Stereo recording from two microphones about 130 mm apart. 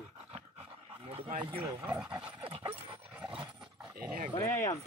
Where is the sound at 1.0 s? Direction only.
50° right (ahead or behind).